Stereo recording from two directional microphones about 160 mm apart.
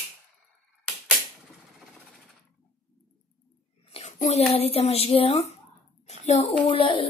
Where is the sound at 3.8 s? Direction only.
40° left (ahead or behind).